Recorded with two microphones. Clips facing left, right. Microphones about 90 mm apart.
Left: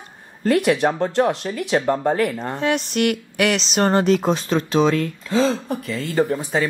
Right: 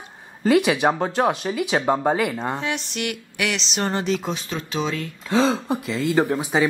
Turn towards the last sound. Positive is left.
turn(degrees=-10)  # may be behind; listen again after turning